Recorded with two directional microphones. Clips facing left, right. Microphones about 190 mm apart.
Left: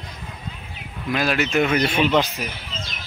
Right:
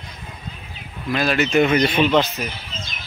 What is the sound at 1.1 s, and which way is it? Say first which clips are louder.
Speech: right 2 dB; 10° left (ahead or behind).